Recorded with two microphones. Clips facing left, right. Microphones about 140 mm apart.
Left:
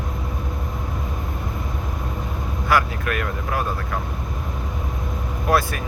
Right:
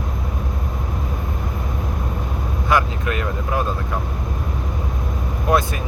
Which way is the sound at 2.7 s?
25° right (ahead or behind).